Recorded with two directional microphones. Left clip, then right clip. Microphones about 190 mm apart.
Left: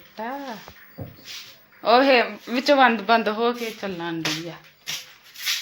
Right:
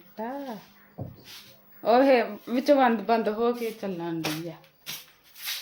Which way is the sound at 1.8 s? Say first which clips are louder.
Left 4 dB; 15° right (ahead or behind).